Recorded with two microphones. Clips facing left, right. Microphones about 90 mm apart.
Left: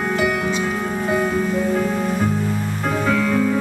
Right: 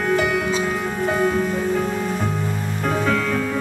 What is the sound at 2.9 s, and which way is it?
Music, centre (ahead or behind).